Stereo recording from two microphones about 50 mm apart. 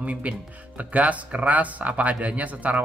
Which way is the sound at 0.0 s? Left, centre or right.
Right.